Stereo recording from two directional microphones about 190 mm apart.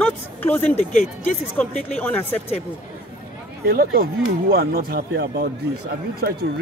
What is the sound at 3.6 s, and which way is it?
Speech, 50° right (ahead or behind).